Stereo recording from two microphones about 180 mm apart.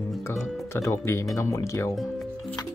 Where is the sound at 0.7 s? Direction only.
15° left (ahead or behind).